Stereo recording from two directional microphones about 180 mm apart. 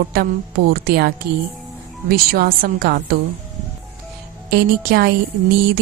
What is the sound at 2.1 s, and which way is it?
A woman's voice, 55° right (ahead or behind).